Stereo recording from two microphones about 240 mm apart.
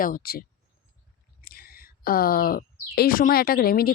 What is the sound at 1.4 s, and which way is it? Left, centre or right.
Speech, left.